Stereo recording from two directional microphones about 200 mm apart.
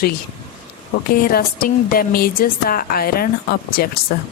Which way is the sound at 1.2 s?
50° left (ahead or behind).